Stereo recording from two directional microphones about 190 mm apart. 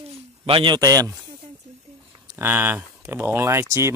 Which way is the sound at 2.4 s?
10° right (ahead or behind).